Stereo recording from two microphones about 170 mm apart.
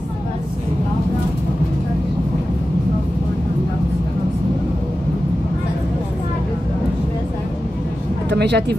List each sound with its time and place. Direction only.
8.3 s speech: 80° right